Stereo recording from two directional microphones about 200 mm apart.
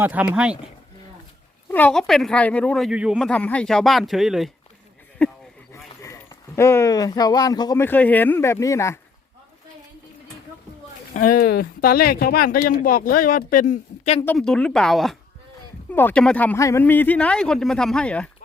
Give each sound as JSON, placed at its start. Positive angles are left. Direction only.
{"t": 0.0, "sound": "speech", "side_deg": -10}
{"t": 1.7, "sound": "speech", "side_deg": 5}
{"t": 5.7, "sound": "speech", "side_deg": 15}
{"t": 11.1, "sound": "speech", "side_deg": 40}
{"t": 14.3, "sound": "speech", "side_deg": 5}